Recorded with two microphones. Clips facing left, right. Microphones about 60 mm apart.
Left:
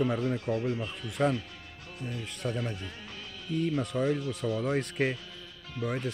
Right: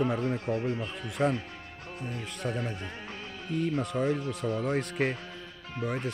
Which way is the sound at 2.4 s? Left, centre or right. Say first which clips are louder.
Even; centre.